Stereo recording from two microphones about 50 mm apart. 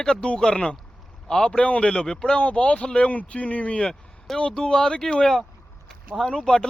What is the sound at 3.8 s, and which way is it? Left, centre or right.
Speech, centre.